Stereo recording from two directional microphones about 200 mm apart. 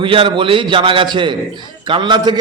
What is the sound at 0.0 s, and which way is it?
A man's voice, 25° right (ahead or behind).